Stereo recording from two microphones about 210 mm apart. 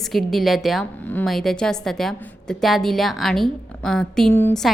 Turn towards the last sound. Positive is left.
turn(degrees=5)  # may be behind; listen again after turning